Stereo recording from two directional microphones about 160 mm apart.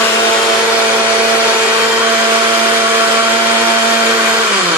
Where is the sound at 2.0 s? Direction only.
15° right (ahead or behind).